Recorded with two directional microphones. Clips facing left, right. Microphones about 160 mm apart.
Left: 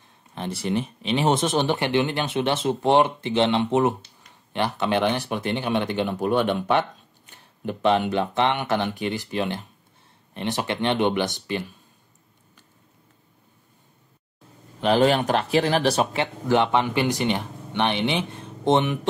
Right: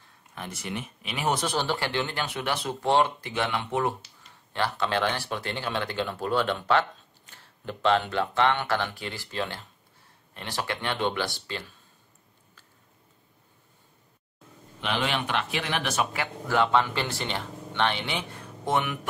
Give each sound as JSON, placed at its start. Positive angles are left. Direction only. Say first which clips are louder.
{"t": 0.3, "sound": "speech", "louder": "left 9 dB", "side_deg": 30}
{"t": 14.8, "sound": "speech", "louder": "left 10 dB", "side_deg": 40}